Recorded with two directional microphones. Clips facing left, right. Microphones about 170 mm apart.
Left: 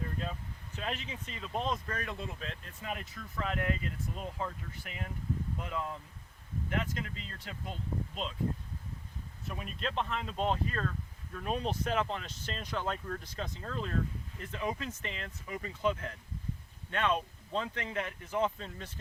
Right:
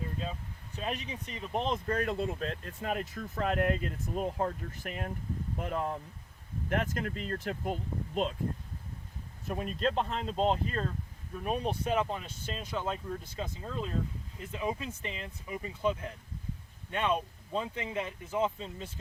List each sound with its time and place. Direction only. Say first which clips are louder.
0.8 s speech: right 2 dB; 15° right (ahead or behind); by 8.4 s 50° right (ahead or behind)
9.5 s speech: right 7 dB; 40° right (ahead or behind); by 10.9 s 25° right (ahead or behind)
11.3 s speech: right 2 dB; 10° right (ahead or behind)